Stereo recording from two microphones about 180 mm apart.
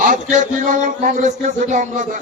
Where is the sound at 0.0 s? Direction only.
45° right (ahead or behind).